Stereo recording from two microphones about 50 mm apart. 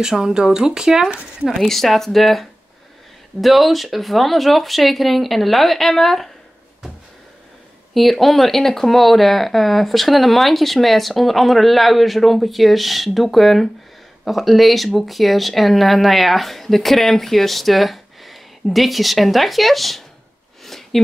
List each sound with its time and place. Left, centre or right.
0.0 s speech: centre
1.6 s speech: centre
7.9 s speech: centre
20.6 s a sound: centre